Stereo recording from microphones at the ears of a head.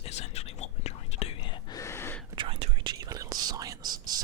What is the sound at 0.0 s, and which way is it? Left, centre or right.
Whispering, left.